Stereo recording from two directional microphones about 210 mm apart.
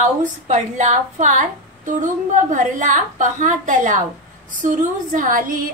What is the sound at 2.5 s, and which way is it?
Speech, 40° right (ahead or behind).